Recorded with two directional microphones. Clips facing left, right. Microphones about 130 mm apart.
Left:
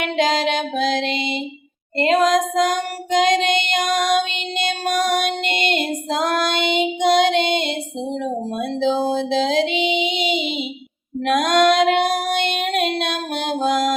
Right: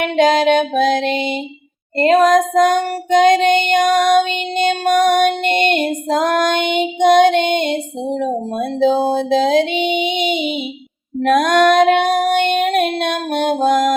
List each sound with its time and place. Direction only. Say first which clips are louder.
0.0 s music: right 6 dB; 45° right (ahead or behind)
2.2 s child singing: right 5 dB; 40° right (ahead or behind)
4.6 s female singing: right 7 dB; 40° right (ahead or behind)
11.2 s child singing: right 4 dB; 45° right (ahead or behind)